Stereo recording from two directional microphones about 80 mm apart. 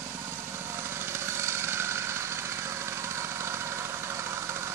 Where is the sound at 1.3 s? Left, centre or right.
Right.